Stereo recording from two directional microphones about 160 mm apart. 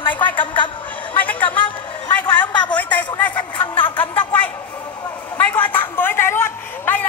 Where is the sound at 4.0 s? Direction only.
10° left (ahead or behind).